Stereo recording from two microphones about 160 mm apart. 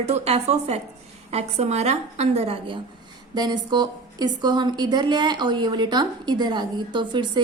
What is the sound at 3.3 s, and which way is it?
A woman's voice, 25° right (ahead or behind).